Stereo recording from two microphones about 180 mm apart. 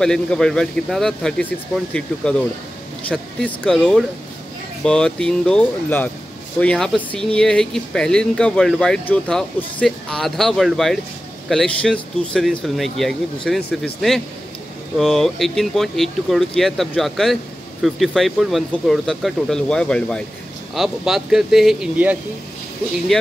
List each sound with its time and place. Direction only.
0.0 s speech: 5° left (ahead or behind)
3.1 s speech: 5° left (ahead or behind)
13.6 s speech: 60° left (ahead or behind)
15.0 s speech: centre (ahead or behind)